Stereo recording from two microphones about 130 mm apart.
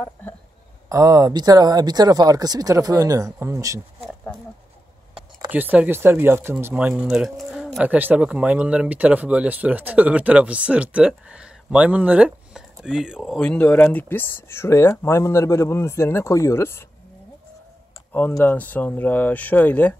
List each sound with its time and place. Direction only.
0.8 s speech: 25° right (ahead or behind)
4.0 s a sound: 5° left (ahead or behind)
5.5 s speech: 10° right (ahead or behind)
7.8 s speech: 10° right (ahead or behind)
13.4 s speech: 10° left (ahead or behind)
18.4 s speech: 15° left (ahead or behind)